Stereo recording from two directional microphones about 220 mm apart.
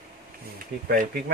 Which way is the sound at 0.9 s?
45° right (ahead or behind).